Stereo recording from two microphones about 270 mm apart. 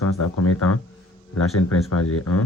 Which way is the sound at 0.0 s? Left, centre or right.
Left.